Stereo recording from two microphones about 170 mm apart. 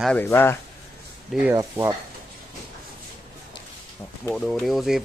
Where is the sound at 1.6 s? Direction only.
20° right (ahead or behind).